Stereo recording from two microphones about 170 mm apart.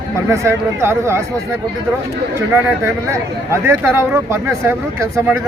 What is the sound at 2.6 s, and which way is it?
Speech, 15° right (ahead or behind).